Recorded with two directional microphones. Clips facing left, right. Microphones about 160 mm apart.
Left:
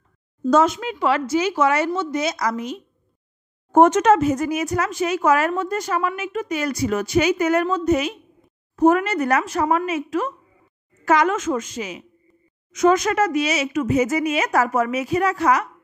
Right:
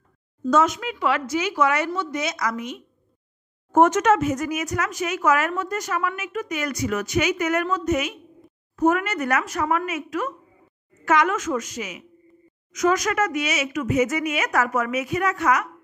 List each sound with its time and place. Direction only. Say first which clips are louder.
0.4 s speech: left 3 dB; 30° left (ahead or behind)